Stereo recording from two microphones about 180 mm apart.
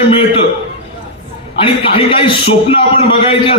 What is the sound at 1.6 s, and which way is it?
A man's voice, 30° left (ahead or behind).